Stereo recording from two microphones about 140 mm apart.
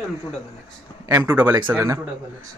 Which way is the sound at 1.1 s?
25° right (ahead or behind).